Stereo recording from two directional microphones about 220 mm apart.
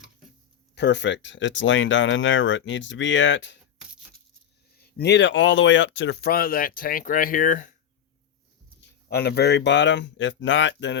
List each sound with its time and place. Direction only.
0.8 s speech: 50° left (ahead or behind)
4.9 s speech: 50° left (ahead or behind)
8.8 s speech: 45° left (ahead or behind)